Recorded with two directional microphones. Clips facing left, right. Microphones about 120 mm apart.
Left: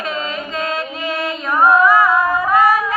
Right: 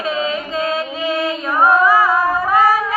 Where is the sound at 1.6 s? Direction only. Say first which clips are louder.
Left 1 dB; 30° right (ahead or behind).